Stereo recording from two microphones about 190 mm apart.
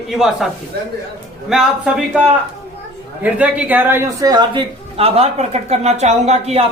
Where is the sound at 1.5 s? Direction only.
Centre (ahead or behind).